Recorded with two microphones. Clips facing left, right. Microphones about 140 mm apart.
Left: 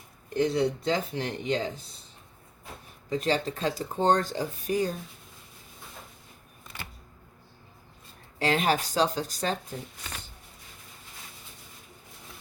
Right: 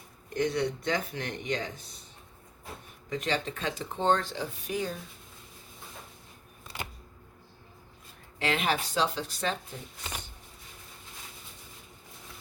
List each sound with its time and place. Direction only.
0.3 s speech: 30° left (ahead or behind)
3.1 s speech: 35° left (ahead or behind)
8.4 s speech: 35° left (ahead or behind)